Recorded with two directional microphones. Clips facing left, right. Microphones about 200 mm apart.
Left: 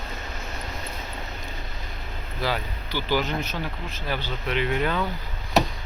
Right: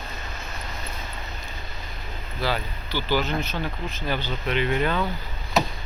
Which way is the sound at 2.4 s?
15° left (ahead or behind).